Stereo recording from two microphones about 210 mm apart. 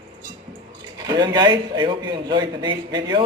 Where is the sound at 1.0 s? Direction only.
20° right (ahead or behind).